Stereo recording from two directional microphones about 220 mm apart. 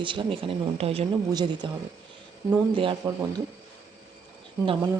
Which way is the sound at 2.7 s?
25° right (ahead or behind).